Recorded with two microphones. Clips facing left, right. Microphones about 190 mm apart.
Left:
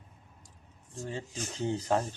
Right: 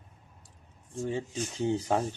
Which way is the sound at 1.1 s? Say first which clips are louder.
Right 3 dB; 15° right (ahead or behind).